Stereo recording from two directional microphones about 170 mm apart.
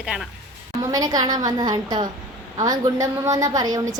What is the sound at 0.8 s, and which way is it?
A woman's voice, 20° right (ahead or behind).